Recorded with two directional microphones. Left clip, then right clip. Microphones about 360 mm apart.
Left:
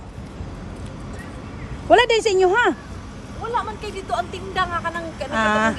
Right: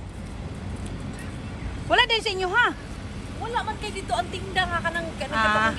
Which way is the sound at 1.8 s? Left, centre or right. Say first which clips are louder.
Left 6 dB; centre.